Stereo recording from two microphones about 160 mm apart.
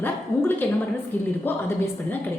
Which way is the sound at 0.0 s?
10° left (ahead or behind).